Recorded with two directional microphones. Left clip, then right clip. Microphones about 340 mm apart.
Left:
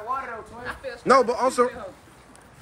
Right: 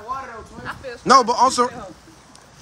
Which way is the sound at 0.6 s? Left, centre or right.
Right.